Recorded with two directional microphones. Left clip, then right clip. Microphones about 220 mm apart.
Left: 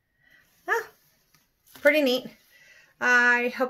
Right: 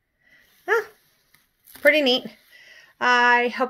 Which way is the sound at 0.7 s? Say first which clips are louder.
Right 5 dB; 25° right (ahead or behind).